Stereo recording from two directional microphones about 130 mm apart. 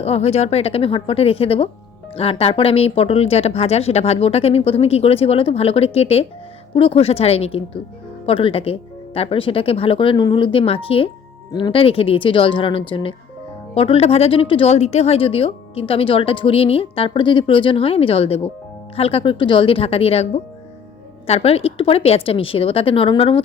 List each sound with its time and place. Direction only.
0.0 s speech: 50° left (ahead or behind)